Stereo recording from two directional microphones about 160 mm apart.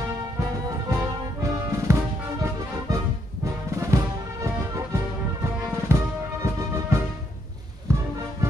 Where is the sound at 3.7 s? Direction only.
20° right (ahead or behind).